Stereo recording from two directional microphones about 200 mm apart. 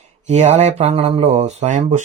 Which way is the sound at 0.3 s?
35° right (ahead or behind).